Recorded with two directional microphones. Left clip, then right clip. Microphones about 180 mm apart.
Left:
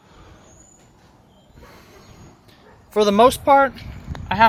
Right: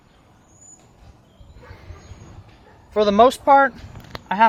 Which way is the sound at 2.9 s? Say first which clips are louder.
Even; 30° left (ahead or behind).